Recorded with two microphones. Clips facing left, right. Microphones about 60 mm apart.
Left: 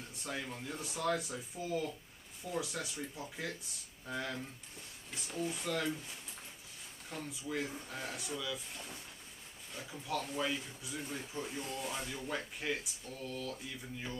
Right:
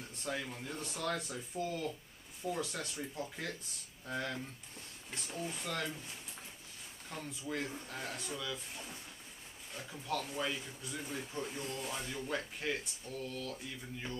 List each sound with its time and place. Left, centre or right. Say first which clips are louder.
0.1 s speech: right 2 dB; centre
13.3 s a sound: left 1 dB; left
13.7 s speech: even; centre